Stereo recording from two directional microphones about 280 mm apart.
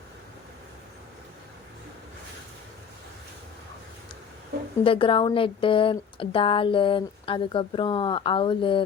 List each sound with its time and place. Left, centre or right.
4.8 s speech: centre